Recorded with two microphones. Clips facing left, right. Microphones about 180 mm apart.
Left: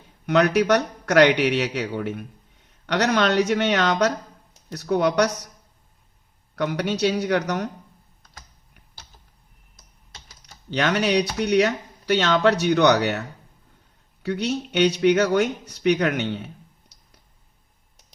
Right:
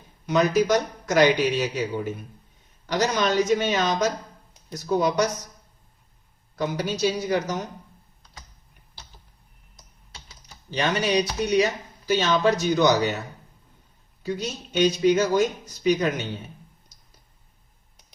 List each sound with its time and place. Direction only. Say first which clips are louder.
0.3 s speech: left 2 dB; 65° left (ahead or behind)
6.6 s speech: left 2 dB; 70° left (ahead or behind)
10.7 s speech: left 2 dB; 70° left (ahead or behind)